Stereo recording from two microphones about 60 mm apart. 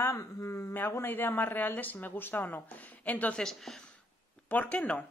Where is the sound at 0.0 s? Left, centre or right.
Left.